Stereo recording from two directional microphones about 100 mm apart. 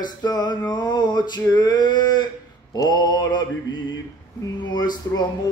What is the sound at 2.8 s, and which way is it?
Mantra, 40° left (ahead or behind).